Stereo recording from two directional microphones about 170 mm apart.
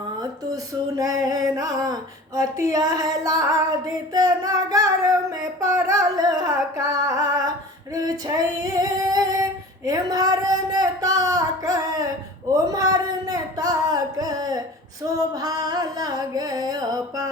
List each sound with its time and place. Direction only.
0.2 s a sound: 20° right (ahead or behind)
5.7 s singing: 20° right (ahead or behind)
6.7 s music: 20° right (ahead or behind)
7.9 s female singing: 20° right (ahead or behind)
12.6 s carnatic music: 20° right (ahead or behind)
15.0 s a sound: 20° right (ahead or behind)